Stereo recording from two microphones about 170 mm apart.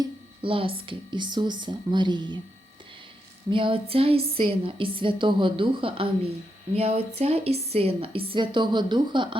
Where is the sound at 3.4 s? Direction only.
30° right (ahead or behind).